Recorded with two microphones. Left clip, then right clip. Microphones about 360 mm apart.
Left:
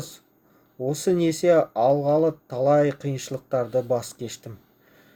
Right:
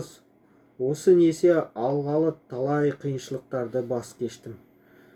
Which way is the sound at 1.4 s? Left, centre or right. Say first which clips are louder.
Left 3 dB; left.